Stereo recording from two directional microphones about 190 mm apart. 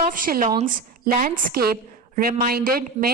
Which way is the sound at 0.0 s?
45° right (ahead or behind).